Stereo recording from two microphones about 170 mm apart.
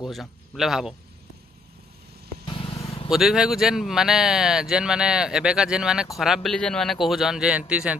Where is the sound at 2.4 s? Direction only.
30° left (ahead or behind).